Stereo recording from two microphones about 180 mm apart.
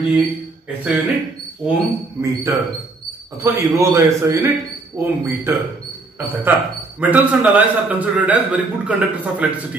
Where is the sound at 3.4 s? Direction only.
15° right (ahead or behind).